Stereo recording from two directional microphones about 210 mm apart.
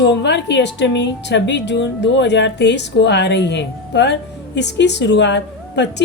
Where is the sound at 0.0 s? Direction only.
55° left (ahead or behind).